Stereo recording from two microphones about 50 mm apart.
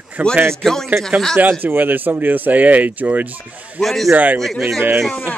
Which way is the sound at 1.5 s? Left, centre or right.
Right.